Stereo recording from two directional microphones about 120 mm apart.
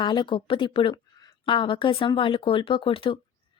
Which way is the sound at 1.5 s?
45° left (ahead or behind).